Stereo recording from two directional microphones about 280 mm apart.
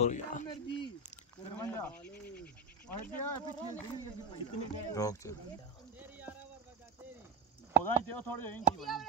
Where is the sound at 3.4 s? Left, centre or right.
Centre.